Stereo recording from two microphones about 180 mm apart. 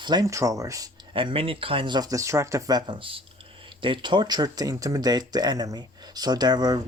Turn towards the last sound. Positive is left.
turn(degrees=-20)  # may be behind; listen again after turning